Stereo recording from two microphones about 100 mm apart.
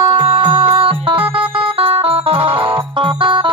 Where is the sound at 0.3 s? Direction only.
55° right (ahead or behind).